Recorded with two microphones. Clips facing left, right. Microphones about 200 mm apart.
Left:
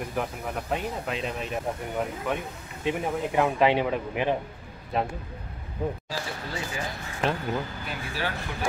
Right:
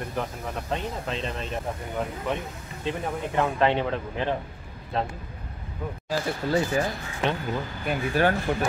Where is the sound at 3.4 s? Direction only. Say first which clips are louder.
Left 1 dB; 10° left (ahead or behind).